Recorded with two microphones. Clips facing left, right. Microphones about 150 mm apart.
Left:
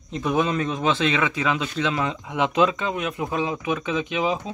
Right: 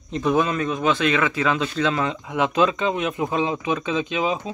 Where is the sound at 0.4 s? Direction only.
25° left (ahead or behind); by 2.8 s 10° left (ahead or behind).